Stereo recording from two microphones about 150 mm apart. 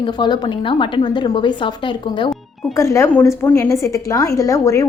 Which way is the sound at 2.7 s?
20° left (ahead or behind).